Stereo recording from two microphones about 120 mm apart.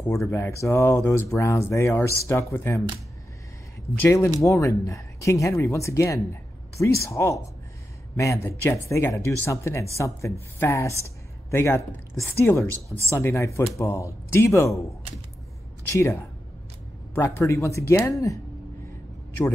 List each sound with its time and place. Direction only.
0.3 s speech: 25° left (ahead or behind)
4.0 s speech: 25° left (ahead or behind)
15.9 s speech: 25° left (ahead or behind)